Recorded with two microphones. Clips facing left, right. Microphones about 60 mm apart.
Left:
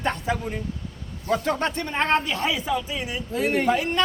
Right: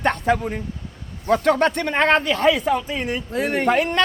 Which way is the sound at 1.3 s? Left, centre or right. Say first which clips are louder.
Right 6 dB; right.